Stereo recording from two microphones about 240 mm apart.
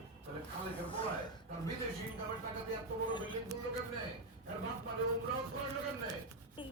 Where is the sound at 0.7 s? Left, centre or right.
Left.